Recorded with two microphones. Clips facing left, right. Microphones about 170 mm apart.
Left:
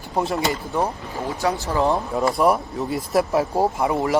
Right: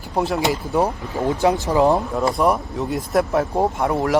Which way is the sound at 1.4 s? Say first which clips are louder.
Right 4 dB; 20° right (ahead or behind).